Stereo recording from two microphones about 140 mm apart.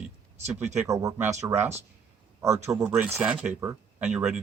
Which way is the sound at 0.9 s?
25° right (ahead or behind).